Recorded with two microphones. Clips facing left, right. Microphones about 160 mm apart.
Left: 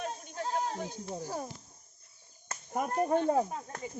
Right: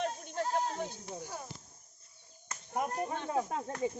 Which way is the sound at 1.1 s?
40° left (ahead or behind).